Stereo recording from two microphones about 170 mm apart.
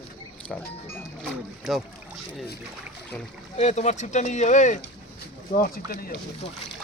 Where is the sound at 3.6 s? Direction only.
40° left (ahead or behind).